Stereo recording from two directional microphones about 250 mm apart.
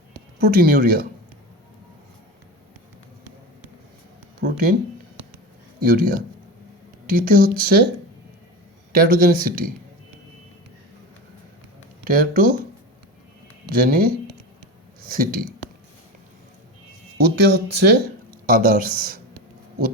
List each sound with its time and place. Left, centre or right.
0.3 s speech: right
4.4 s a sound: right
5.8 s speech: right
8.9 s speech: right
12.0 s speech: right
13.7 s speech: right
15.1 s speech: right
17.2 s speech: right